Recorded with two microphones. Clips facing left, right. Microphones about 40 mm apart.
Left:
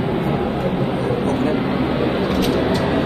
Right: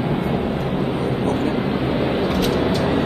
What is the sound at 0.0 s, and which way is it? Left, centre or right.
Vehicle, centre.